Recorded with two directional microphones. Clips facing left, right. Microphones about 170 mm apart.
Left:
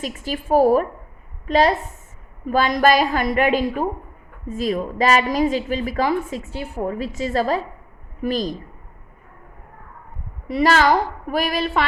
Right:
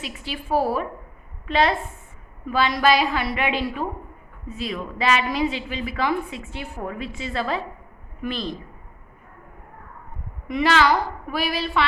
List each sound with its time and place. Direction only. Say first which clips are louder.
0.0 s a woman's voice: left 6 dB; 45° left (ahead or behind)
10.5 s a woman's voice: left 3 dB; 40° left (ahead or behind)